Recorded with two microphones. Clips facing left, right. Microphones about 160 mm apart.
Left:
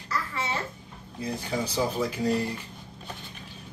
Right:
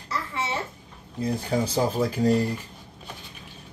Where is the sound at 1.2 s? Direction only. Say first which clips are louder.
Right 5 dB; 40° right (ahead or behind).